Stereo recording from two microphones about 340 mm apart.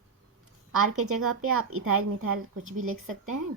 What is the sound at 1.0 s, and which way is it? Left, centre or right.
A woman's voice, right.